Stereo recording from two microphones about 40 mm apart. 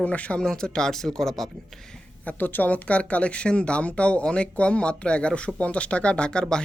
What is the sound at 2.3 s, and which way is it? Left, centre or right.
Speech, left.